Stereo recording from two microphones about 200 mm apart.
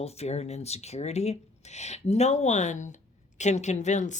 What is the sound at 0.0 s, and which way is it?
A woman's voice, 30° left (ahead or behind).